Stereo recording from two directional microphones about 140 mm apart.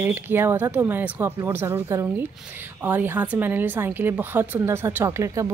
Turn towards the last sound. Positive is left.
turn(degrees=-20)  # may be behind; listen again after turning